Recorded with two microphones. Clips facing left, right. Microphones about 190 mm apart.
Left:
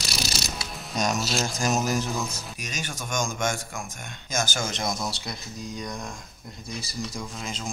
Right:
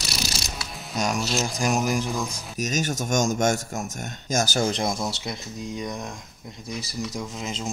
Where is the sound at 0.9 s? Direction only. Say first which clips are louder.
Right 1 dB; 10° right (ahead or behind).